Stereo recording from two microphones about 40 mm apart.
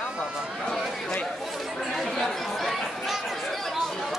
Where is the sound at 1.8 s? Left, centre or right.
Centre.